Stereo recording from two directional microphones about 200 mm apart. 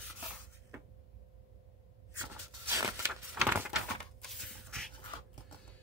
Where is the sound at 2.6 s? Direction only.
10° right (ahead or behind).